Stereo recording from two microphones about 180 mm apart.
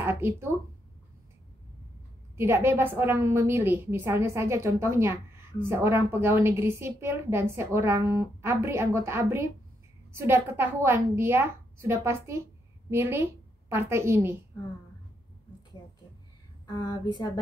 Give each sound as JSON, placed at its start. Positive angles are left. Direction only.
{"t": 0.0, "sound": "speech", "side_deg": -10}
{"t": 2.3, "sound": "a woman's voice", "side_deg": -15}
{"t": 16.6, "sound": "a woman's voice", "side_deg": 20}